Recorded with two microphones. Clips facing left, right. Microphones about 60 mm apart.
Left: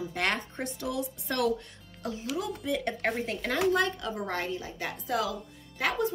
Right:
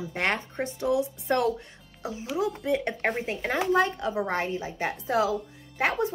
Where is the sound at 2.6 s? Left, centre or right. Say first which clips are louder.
Right 4 dB; right.